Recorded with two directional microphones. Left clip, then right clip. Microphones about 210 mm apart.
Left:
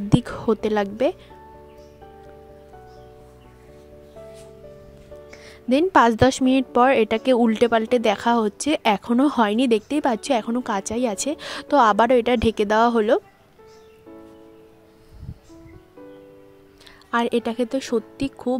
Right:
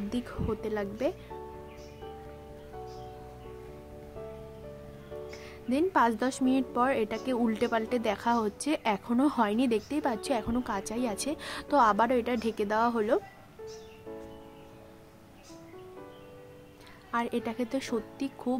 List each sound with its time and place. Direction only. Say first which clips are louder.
0.1 s a woman's voice: left 14 dB; 40° left (ahead or behind)
5.7 s a woman's voice: left 10 dB; 45° left (ahead or behind)
17.1 s a woman's voice: left 10 dB; 40° left (ahead or behind)